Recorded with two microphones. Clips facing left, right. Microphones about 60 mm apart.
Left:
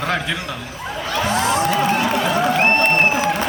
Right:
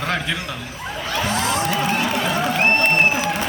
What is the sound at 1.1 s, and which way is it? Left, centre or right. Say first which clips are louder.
Music: left 2 dB; left.